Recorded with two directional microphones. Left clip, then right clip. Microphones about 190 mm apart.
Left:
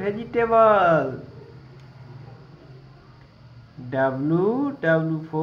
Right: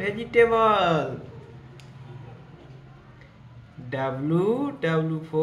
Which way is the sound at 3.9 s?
10° left (ahead or behind).